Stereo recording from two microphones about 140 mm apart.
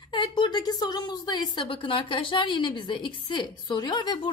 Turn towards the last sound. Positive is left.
turn(degrees=35)  # may be behind; listen again after turning